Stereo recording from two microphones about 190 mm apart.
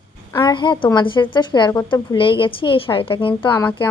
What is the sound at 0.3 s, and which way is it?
A woman's voice, 25° left (ahead or behind).